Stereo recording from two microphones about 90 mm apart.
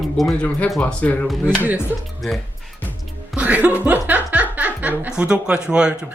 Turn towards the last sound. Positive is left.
turn(degrees=-10)  # may be behind; listen again after turning